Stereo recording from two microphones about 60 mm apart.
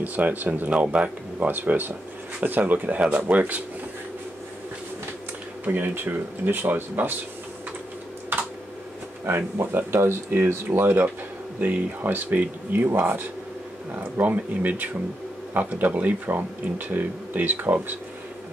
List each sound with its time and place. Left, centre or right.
0.0 s speech: right
5.7 s speech: right
9.2 s speech: right